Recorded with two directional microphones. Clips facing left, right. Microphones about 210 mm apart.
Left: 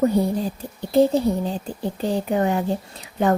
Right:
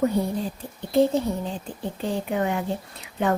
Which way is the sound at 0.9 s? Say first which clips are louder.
Left 3 dB; 35° left (ahead or behind).